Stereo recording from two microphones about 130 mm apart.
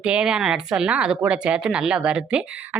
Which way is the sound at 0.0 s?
10° right (ahead or behind).